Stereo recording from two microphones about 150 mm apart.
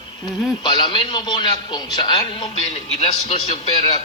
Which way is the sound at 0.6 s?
30° left (ahead or behind).